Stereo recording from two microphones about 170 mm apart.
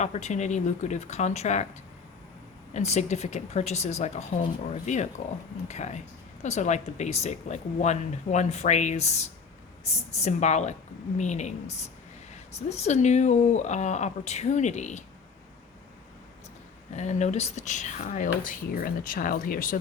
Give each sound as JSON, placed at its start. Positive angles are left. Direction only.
{"t": 0.0, "sound": "speech", "side_deg": 40}
{"t": 2.7, "sound": "speech", "side_deg": 40}
{"t": 16.9, "sound": "speech", "side_deg": 40}
{"t": 18.4, "sound": "speech", "side_deg": 55}